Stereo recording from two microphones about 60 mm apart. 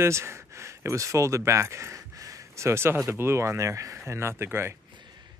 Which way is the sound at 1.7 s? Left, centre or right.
Right.